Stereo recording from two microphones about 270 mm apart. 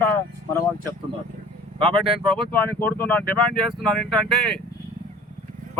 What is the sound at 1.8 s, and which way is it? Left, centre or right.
Speech, right.